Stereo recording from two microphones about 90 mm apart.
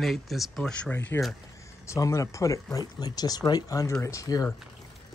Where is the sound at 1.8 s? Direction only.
35° left (ahead or behind).